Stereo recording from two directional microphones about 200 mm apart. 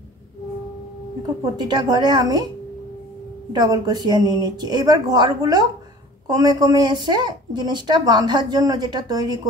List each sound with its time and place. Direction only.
1.4 s speech: 20° right (ahead or behind)
3.6 s speech: 20° right (ahead or behind)